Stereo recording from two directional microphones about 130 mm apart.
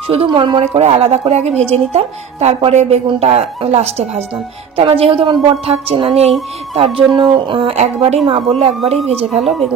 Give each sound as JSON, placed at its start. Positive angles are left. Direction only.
{"t": 0.1, "sound": "a woman's voice", "side_deg": -45}
{"t": 0.7, "sound": "a woman's voice", "side_deg": -55}
{"t": 9.4, "sound": "speech", "side_deg": 0}